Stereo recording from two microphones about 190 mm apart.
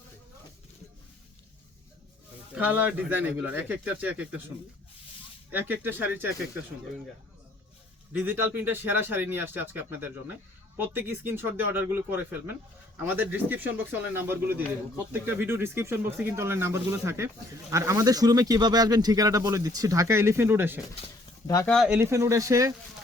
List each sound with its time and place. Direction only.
2.6 s speech: 10° right (ahead or behind)
5.5 s speech: 10° right (ahead or behind)
8.2 s speech: 10° right (ahead or behind)
21.4 s speech: 15° left (ahead or behind)
21.7 s speech: 5° right (ahead or behind)